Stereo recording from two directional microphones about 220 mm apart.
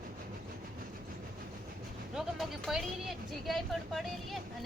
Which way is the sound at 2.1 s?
Centre (ahead or behind).